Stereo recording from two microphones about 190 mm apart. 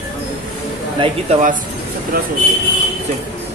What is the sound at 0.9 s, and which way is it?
Speech, 25° right (ahead or behind).